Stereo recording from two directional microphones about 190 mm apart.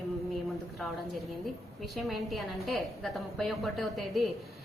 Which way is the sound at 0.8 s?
Centre (ahead or behind).